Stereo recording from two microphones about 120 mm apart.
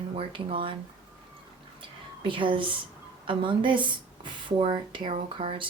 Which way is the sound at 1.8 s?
45° right (ahead or behind).